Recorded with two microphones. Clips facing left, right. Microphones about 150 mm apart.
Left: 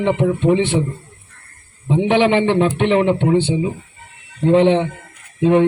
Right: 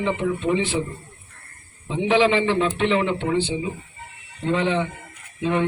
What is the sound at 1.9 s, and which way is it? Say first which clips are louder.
A man's voice: left 4 dB; 60° left (ahead or behind).